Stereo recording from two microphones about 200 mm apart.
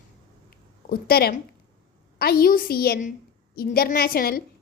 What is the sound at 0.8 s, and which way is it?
A woman's voice, 50° left (ahead or behind).